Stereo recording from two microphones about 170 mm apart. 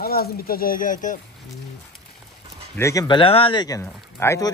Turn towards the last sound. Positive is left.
turn(degrees=15)  # may be behind; listen again after turning